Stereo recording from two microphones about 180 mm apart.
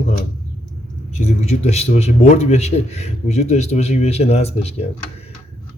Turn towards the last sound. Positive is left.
turn(degrees=35)  # may be behind; listen again after turning